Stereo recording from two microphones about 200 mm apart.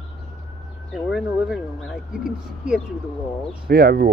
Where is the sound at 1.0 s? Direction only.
Centre (ahead or behind).